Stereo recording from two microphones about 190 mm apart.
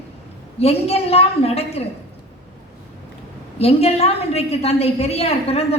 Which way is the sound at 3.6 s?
30° left (ahead or behind).